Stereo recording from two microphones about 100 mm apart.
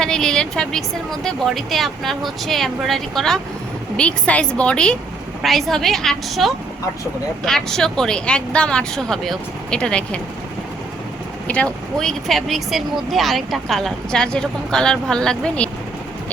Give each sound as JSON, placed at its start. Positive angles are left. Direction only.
{"t": 0.0, "sound": "speech", "side_deg": 5}
{"t": 11.4, "sound": "speech", "side_deg": 10}